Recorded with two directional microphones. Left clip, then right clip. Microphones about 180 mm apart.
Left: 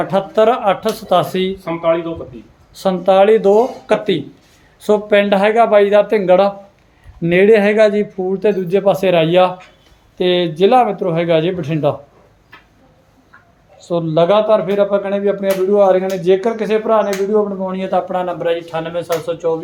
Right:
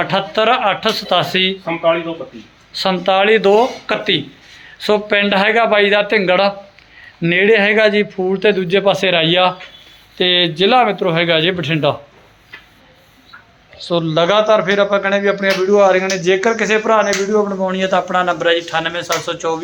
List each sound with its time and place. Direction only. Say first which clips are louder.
0.0 s speech: left 2 dB; 15° left (ahead or behind)
13.7 s speech: left 1 dB; 5° left (ahead or behind)